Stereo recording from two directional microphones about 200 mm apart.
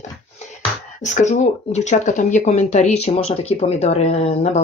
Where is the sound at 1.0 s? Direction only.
35° left (ahead or behind).